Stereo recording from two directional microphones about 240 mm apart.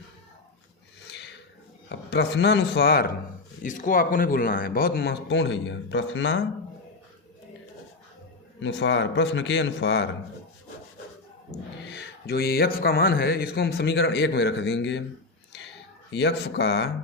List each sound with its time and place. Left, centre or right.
1.9 s speech: left
8.6 s speech: left
11.9 s speech: left
16.0 s speech: left